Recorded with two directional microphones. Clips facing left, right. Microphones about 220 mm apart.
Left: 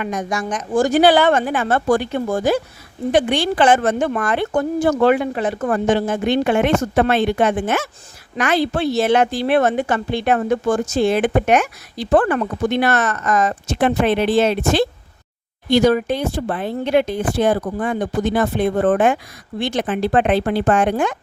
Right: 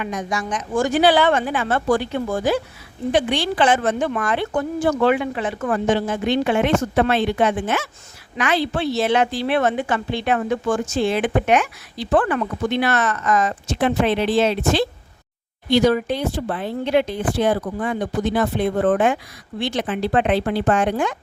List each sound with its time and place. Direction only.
0.0 s a woman's voice: 45° left (ahead or behind)